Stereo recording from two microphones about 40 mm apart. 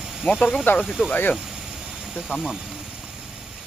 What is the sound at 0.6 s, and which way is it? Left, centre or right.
Speech, left.